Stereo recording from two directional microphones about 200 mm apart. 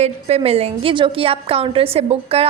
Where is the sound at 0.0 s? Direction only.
30° right (ahead or behind).